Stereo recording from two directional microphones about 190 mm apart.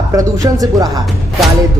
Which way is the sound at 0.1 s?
20° right (ahead or behind).